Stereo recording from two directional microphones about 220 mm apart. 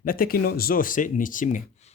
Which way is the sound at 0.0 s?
40° left (ahead or behind).